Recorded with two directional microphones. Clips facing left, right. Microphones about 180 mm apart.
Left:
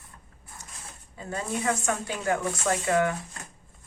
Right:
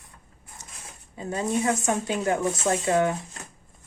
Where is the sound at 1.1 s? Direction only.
20° right (ahead or behind).